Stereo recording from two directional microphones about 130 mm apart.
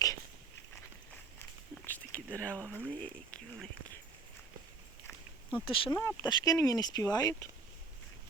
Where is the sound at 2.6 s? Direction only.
15° right (ahead or behind).